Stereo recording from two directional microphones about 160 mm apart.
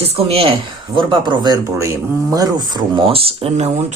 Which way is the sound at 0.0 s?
40° right (ahead or behind).